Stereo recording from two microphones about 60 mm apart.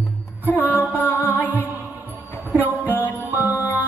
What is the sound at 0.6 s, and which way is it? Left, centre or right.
Music, left.